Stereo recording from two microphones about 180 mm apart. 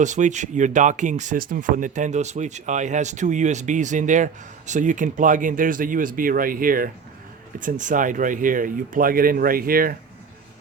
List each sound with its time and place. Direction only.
0.0 s speech: 40° right (ahead or behind)